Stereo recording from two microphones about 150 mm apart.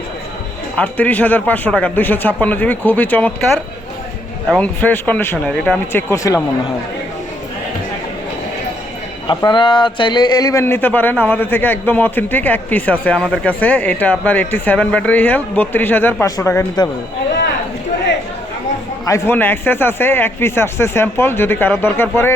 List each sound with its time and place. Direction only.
0.8 s a man's voice: 10° left (ahead or behind)
4.4 s a man's voice: 5° left (ahead or behind)
9.2 s a man's voice: 30° left (ahead or behind)
19.0 s a man's voice: 20° left (ahead or behind)